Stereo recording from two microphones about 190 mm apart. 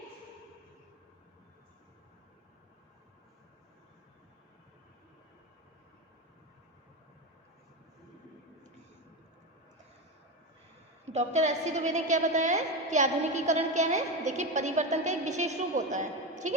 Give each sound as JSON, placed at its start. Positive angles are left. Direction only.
{"t": 11.0, "sound": "a woman's voice", "side_deg": -35}